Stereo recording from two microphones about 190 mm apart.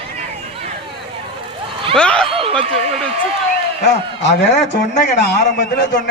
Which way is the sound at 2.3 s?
30° right (ahead or behind).